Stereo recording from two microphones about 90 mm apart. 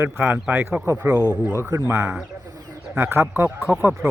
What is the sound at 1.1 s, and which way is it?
Speech, 45° right (ahead or behind).